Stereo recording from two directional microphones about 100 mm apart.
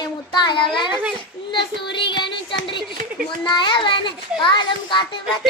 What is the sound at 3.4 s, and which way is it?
A child's voice, 50° left (ahead or behind).